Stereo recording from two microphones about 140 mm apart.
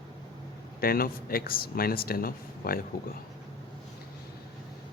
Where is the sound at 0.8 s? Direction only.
90° left.